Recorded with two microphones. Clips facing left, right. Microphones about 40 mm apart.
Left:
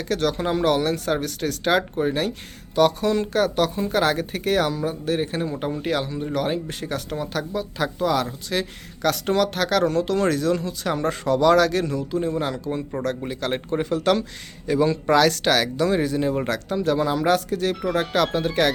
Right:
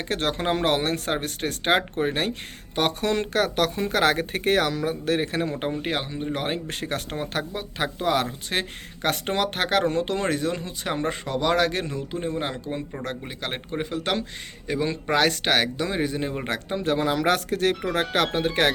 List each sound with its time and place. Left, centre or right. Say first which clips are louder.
0.0 s speech: left 3 dB; right
5.8 s speech: left 3 dB; right
6.5 s speech: left 2 dB; right
13.0 s a man's voice: left 6 dB; centre
16.5 s speech: left 3 dB; right